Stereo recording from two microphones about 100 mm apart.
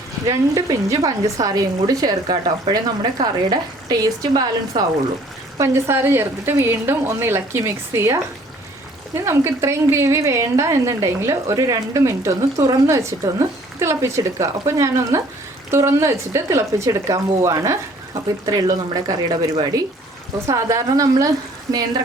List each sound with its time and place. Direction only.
0.3 s speech: 35° right (ahead or behind)
5.5 s a woman's voice: 25° right (ahead or behind)
20.5 s speech: 30° right (ahead or behind)